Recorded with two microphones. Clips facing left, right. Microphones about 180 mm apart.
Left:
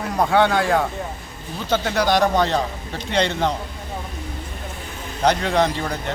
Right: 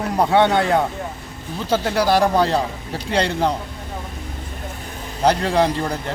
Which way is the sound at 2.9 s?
35° right (ahead or behind).